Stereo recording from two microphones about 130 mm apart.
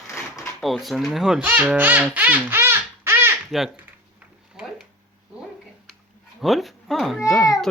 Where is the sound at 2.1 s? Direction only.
10° right (ahead or behind).